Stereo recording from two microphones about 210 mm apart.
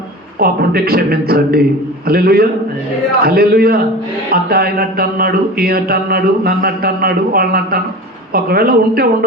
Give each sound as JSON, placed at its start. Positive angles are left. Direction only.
{"t": 0.3, "sound": "speech", "side_deg": -45}